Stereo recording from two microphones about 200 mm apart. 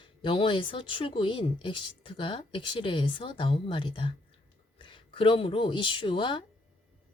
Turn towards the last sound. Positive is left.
turn(degrees=25)  # may be behind; listen again after turning